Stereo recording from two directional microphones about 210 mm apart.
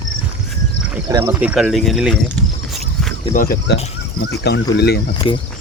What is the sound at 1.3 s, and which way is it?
Speech, 5° right (ahead or behind).